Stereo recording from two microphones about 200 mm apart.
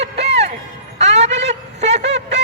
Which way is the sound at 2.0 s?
60° right (ahead or behind).